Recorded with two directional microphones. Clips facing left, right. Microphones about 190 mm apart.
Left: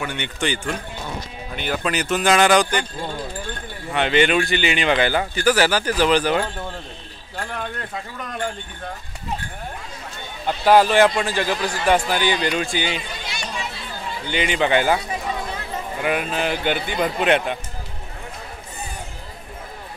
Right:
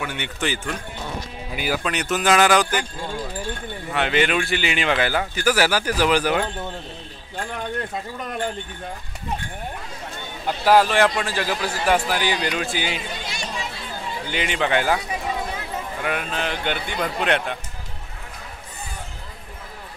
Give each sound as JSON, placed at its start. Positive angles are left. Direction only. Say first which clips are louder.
{"t": 0.0, "sound": "speech", "louder": "left 1 dB", "side_deg": -5}
{"t": 3.9, "sound": "speech", "louder": "left 3 dB", "side_deg": 0}
{"t": 10.6, "sound": "speech", "louder": "left 2 dB", "side_deg": 0}
{"t": 14.2, "sound": "speech", "louder": "left 4 dB", "side_deg": 0}
{"t": 16.0, "sound": "speech", "louder": "left 5 dB", "side_deg": 5}